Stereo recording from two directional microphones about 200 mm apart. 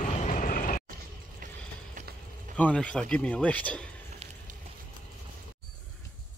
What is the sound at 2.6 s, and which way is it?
Speech, 5° left (ahead or behind).